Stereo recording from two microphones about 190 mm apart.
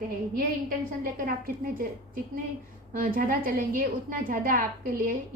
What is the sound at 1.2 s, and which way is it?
A woman's voice, 50° right (ahead or behind).